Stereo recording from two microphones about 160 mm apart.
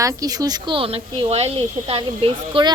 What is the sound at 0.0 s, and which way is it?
A woman's voice, 25° right (ahead or behind).